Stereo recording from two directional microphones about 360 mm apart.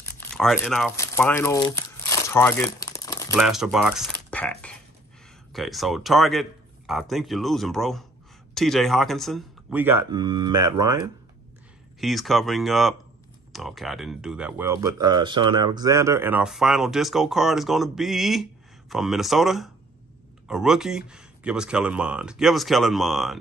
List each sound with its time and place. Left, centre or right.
0.0 s crumpling: centre
3.3 s speech: centre
10.5 s speech: right
12.0 s speech: centre